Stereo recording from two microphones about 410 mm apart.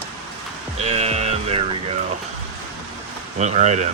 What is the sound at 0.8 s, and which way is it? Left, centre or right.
Music, centre.